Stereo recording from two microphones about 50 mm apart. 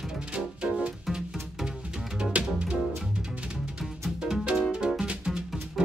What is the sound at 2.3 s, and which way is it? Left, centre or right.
Music, right.